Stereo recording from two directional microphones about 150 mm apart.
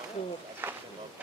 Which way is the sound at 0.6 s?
15° right (ahead or behind).